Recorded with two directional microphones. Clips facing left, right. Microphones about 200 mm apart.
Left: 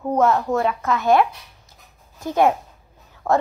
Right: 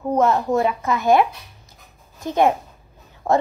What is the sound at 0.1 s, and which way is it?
Speech, 10° right (ahead or behind).